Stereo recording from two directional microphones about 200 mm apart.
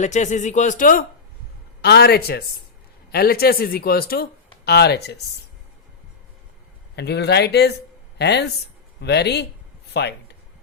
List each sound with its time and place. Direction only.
0.0 s speech: 35° left (ahead or behind)
1.8 s speech: 55° left (ahead or behind)
6.9 s speech: 55° left (ahead or behind)